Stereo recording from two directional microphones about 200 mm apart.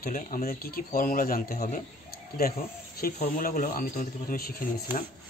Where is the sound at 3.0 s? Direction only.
45° left (ahead or behind).